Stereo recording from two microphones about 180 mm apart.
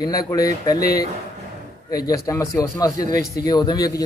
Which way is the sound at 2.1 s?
20° left (ahead or behind).